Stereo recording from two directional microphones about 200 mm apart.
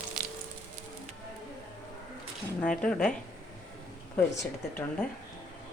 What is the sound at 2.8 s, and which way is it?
Speech, 5° left (ahead or behind).